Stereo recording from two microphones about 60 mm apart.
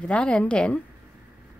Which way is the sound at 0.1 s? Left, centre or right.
Centre.